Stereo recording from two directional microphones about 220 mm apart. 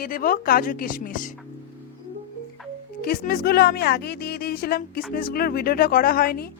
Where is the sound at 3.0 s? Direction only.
45° left (ahead or behind).